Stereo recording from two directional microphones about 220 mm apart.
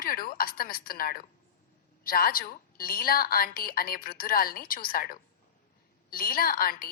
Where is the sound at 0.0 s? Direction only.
40° left (ahead or behind).